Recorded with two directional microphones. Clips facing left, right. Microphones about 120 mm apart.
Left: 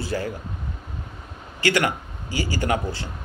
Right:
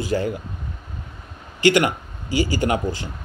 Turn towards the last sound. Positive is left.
turn(degrees=-15)  # may be behind; listen again after turning